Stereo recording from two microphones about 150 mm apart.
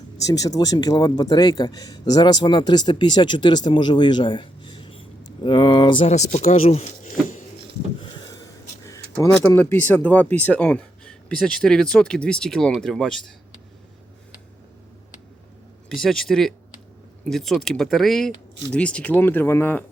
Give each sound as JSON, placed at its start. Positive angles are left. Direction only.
{"t": 0.3, "sound": "speech", "side_deg": 25}
{"t": 6.1, "sound": "speech", "side_deg": 50}
{"t": 8.0, "sound": "a sound", "side_deg": 25}
{"t": 9.5, "sound": "speech", "side_deg": 15}
{"t": 15.9, "sound": "speech", "side_deg": 0}